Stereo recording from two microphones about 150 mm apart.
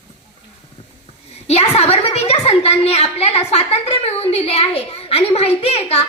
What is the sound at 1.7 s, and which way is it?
A woman's voice, 40° left (ahead or behind).